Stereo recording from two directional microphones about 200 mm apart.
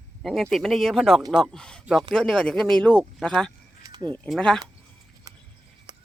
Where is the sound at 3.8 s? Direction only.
20° right (ahead or behind).